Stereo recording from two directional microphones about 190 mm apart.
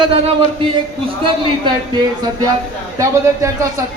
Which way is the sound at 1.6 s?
25° right (ahead or behind).